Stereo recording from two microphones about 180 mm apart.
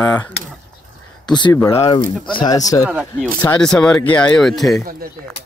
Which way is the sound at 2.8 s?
10° right (ahead or behind).